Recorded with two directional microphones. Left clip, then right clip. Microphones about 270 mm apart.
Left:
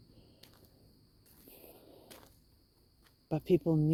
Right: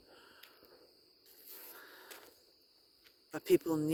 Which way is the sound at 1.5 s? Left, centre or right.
Right.